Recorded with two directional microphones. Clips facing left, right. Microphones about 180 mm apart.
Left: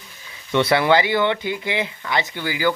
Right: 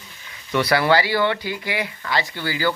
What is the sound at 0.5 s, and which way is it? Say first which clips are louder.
Speech: left 1 dB; 25° left (ahead or behind).